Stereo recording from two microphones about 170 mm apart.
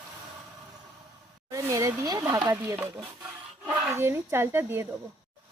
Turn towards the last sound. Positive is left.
turn(degrees=-15)  # may be behind; listen again after turning